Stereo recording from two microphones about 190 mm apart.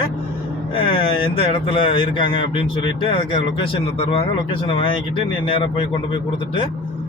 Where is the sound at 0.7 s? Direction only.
30° left (ahead or behind).